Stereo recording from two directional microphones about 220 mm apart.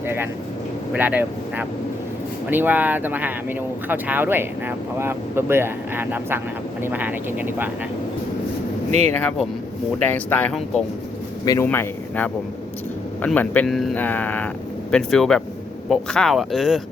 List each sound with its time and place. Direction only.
0.9 s speech: 10° right (ahead or behind)
8.9 s speech: 30° right (ahead or behind)
9.1 s speech: 5° left (ahead or behind)